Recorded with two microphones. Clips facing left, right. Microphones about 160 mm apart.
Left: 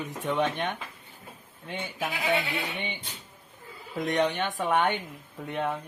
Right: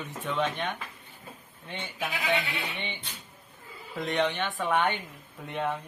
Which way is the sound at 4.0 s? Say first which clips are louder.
Left 2 dB; 15° left (ahead or behind).